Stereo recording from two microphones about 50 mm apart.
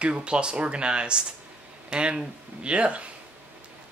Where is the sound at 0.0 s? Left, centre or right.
Right.